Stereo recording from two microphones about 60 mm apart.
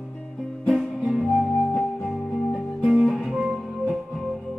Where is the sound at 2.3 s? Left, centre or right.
Centre.